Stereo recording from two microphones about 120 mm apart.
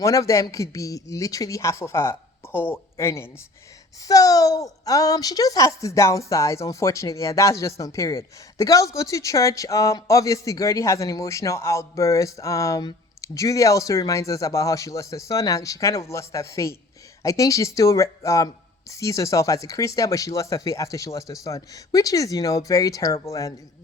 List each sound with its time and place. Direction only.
0.0 s speech: 25° left (ahead or behind)